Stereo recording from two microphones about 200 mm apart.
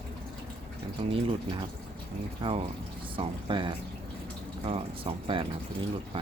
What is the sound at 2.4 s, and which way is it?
Speech, 25° right (ahead or behind).